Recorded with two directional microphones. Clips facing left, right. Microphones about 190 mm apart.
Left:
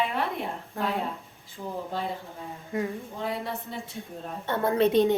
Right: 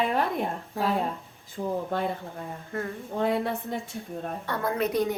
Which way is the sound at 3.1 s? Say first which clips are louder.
Right 6 dB; 55° right (ahead or behind).